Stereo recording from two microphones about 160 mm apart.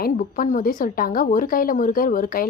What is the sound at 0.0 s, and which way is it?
A woman's voice, 60° left (ahead or behind).